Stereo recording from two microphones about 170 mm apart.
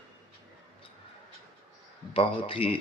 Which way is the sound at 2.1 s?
30° left (ahead or behind).